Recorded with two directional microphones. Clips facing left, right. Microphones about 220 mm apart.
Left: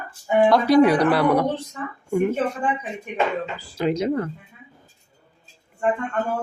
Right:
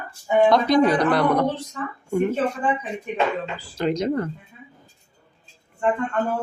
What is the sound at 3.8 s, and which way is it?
Speech, 5° left (ahead or behind).